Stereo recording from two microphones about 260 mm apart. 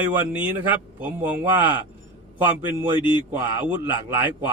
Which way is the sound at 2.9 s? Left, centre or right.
Centre.